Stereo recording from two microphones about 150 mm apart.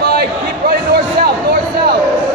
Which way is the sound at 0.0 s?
90° right.